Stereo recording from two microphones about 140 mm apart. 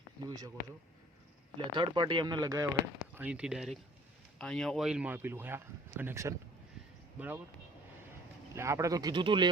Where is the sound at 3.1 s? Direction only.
10° right (ahead or behind).